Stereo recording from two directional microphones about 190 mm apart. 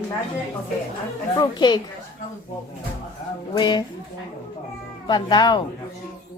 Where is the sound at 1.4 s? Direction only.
20° left (ahead or behind).